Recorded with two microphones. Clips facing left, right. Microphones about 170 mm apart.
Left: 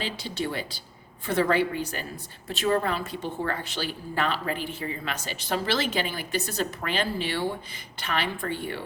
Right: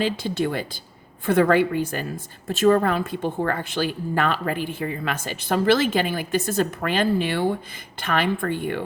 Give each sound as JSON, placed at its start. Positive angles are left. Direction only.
{"t": 0.0, "sound": "a woman's voice", "side_deg": -50}